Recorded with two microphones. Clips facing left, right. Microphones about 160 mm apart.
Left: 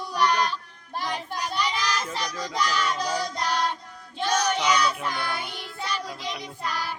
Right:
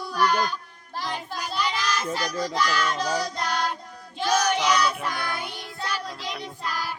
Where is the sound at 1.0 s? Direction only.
5° right (ahead or behind).